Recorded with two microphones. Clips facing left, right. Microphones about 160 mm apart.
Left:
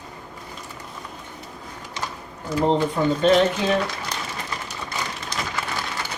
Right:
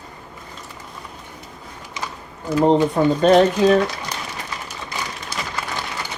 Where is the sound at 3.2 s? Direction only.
40° right (ahead or behind).